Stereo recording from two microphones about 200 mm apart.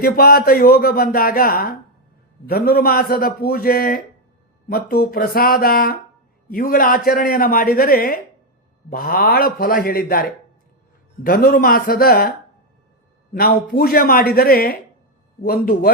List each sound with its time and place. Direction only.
0.0 s speech: 50° left (ahead or behind)
13.3 s speech: 45° left (ahead or behind)